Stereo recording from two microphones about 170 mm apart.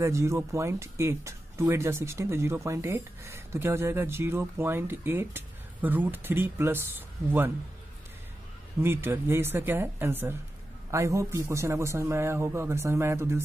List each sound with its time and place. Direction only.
0.0 s speech: 15° right (ahead or behind)
8.8 s speech: 15° right (ahead or behind)